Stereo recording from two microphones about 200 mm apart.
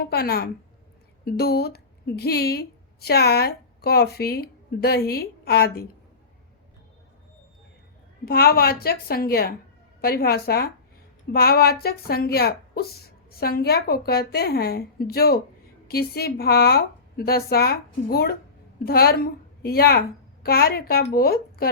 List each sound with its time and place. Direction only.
0.0 s a woman's voice: 50° left (ahead or behind)
8.2 s a woman's voice: 50° left (ahead or behind)